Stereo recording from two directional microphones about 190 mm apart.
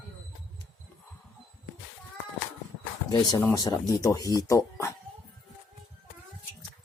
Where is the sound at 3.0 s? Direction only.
20° left (ahead or behind).